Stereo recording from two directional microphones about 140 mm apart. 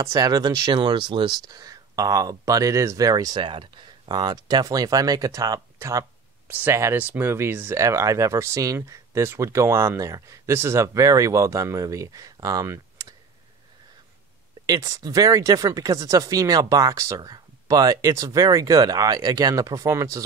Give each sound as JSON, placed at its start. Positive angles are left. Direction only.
{"t": 0.0, "sound": "speech", "side_deg": -25}
{"t": 14.7, "sound": "speech", "side_deg": -25}